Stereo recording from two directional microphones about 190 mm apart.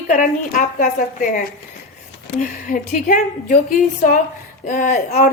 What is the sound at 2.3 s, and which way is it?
A woman's voice, 40° left (ahead or behind).